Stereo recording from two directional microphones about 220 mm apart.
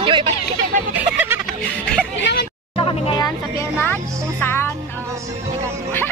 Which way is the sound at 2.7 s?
25° left (ahead or behind).